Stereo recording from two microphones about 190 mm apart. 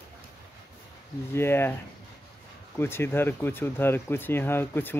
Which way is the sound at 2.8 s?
10° left (ahead or behind).